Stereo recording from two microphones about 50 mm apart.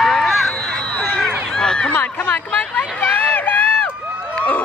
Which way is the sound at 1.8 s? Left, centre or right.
Left.